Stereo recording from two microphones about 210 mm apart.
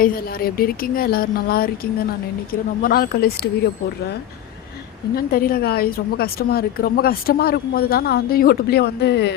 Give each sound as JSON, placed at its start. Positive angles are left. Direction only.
{"t": 0.0, "sound": "a woman's voice", "side_deg": 45}
{"t": 5.1, "sound": "a woman's voice", "side_deg": 45}